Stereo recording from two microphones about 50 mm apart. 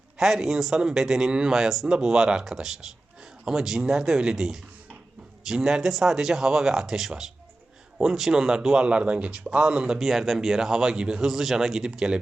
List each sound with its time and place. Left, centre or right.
0.2 s speech: centre
10.0 s speech: centre